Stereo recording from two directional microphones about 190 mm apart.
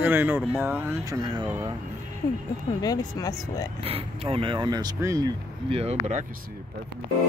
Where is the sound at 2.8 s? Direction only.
20° left (ahead or behind).